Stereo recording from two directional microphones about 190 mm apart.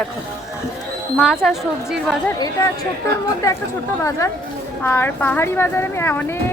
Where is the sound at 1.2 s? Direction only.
Centre (ahead or behind).